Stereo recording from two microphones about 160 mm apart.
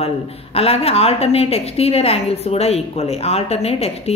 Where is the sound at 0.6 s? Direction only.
40° left (ahead or behind).